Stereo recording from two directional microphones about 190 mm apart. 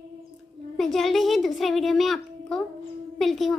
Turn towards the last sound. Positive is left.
turn(degrees=0)  # may be behind; listen again after turning